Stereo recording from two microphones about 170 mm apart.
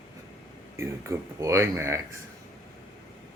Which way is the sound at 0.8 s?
15° right (ahead or behind).